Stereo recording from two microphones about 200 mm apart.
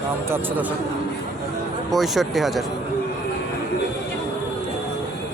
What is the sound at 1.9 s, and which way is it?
Speech, centre (ahead or behind).